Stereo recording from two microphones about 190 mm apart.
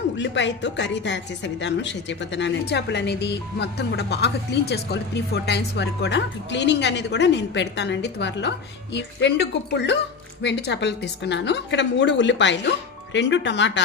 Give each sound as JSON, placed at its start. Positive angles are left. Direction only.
{"t": 0.2, "sound": "a woman's voice", "side_deg": 70}